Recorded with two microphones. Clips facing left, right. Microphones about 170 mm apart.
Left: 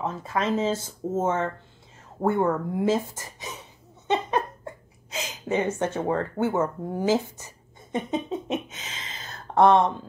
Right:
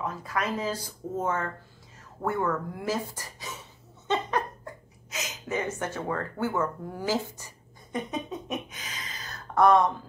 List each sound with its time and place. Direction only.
0.0 s speech: 25° left (ahead or behind)
4.1 s laughter: 20° left (ahead or behind)
5.1 s speech: 30° left (ahead or behind)
7.3 s a sound: 25° left (ahead or behind)